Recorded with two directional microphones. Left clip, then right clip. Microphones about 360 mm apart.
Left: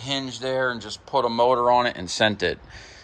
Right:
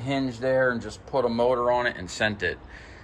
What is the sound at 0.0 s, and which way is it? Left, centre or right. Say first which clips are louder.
Speech: right 1 dB; centre.